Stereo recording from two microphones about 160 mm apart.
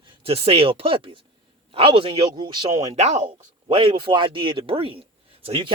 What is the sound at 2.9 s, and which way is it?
Speech, 45° right (ahead or behind).